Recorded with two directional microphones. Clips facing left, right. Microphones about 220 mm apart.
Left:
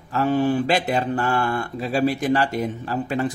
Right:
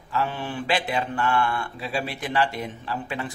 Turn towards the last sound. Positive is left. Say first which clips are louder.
# left 7 dB
turn(degrees=40)  # may be behind; listen again after turning